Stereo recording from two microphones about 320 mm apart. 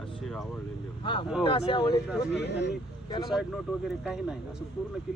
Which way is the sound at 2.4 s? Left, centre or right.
Left.